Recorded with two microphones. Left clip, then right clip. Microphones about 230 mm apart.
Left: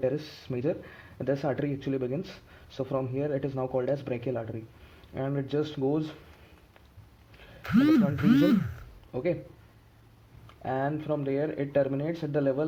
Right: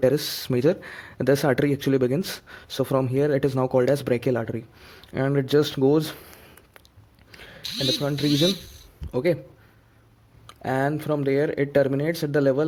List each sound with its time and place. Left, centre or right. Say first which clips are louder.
0.0 s speech: right 9 dB; right
7.3 s a sound: right 9 dB; right
8.0 s speech: right 3 dB; right
10.4 s speech: right 6 dB; right